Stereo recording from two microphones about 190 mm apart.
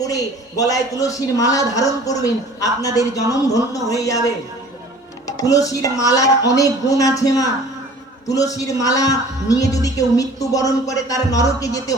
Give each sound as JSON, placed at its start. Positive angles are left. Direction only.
{"t": 0.0, "sound": "a woman's voice", "side_deg": 20}
{"t": 5.2, "sound": "a woman's voice", "side_deg": 20}